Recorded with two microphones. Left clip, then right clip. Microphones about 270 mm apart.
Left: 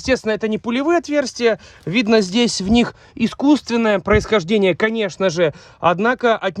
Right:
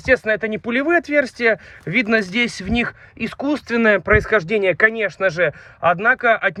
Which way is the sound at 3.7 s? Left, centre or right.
Centre.